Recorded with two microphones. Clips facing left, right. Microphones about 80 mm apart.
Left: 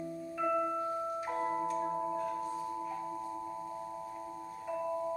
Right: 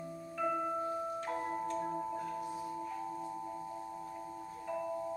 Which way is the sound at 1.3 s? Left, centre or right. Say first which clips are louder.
Left 5 dB; centre.